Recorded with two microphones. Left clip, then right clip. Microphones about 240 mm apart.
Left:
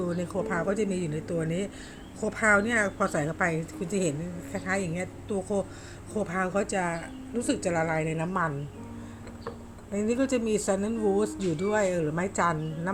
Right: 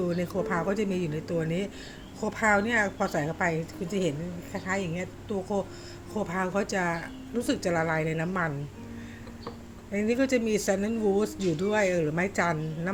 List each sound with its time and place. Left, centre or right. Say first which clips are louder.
0.0 s a woman's voice: right 1 dB; centre
9.9 s speech: right 1 dB; centre